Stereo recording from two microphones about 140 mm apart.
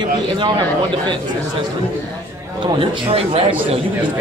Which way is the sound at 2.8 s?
45° right (ahead or behind).